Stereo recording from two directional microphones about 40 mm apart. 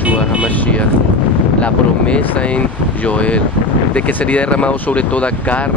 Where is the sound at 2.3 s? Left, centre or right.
Left.